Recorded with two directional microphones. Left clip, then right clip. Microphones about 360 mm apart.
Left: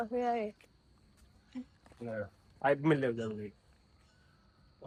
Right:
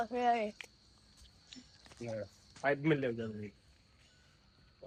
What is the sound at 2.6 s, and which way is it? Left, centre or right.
Speech, left.